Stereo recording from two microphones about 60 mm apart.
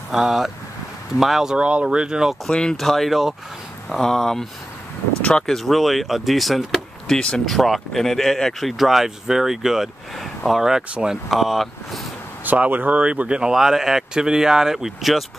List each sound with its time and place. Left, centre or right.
0.1 s speech: centre
2.4 s speech: centre
3.9 s speech: centre
7.2 s speech: centre
7.4 s speech: centre
10.6 s speech: centre
12.4 s speech: right
13.0 s speech: centre